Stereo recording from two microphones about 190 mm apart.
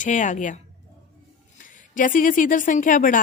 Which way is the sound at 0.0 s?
40° left (ahead or behind).